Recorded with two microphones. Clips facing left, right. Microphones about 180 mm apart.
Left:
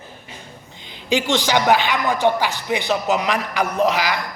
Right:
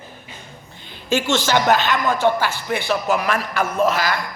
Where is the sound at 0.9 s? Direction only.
15° left (ahead or behind).